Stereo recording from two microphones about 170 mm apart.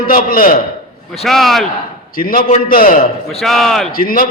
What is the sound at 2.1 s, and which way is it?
Speech, 55° left (ahead or behind).